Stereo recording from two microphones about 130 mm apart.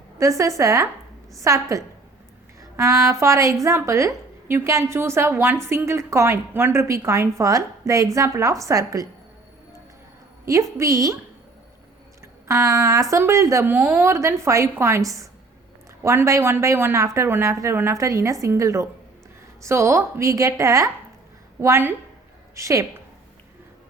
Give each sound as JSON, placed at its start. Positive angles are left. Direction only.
{"t": 0.2, "sound": "a woman's voice", "side_deg": -25}
{"t": 10.4, "sound": "a woman's voice", "side_deg": -25}
{"t": 12.2, "sound": "a woman's voice", "side_deg": -25}